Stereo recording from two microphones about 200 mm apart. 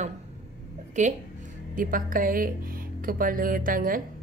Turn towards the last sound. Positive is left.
turn(degrees=-45)  # may be behind; listen again after turning